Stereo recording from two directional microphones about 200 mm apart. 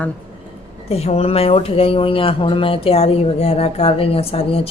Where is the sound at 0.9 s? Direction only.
30° left (ahead or behind).